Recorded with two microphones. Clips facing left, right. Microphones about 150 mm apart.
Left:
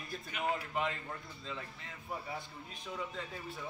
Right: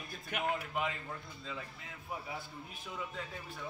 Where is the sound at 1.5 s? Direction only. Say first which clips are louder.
Even; centre (ahead or behind).